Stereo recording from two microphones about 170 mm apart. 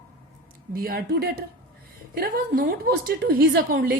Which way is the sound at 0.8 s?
60° right (ahead or behind).